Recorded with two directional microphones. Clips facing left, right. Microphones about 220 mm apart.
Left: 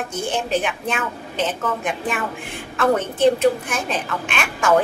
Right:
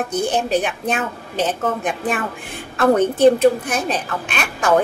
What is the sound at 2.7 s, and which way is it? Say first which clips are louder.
A woman's voice: right 4 dB; 40° right (ahead or behind).